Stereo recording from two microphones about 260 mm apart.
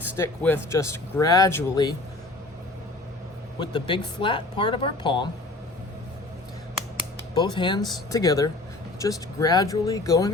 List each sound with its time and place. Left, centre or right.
0.2 s speech: centre
3.6 s speech: centre
7.3 s speech: centre